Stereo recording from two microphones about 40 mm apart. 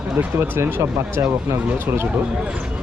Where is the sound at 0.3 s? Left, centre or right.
Right.